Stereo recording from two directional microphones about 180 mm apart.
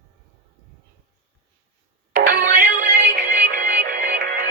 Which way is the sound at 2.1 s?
55° right (ahead or behind).